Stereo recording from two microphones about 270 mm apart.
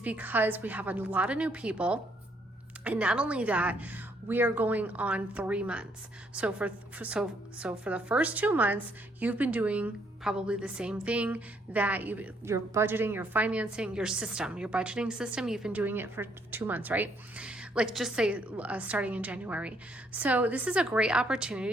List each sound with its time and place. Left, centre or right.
0.0 s a woman's voice: centre